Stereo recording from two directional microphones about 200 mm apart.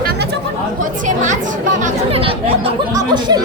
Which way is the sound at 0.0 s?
50° right (ahead or behind).